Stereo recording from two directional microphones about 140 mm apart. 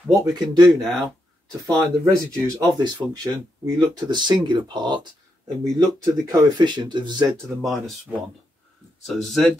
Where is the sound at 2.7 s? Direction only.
30° right (ahead or behind).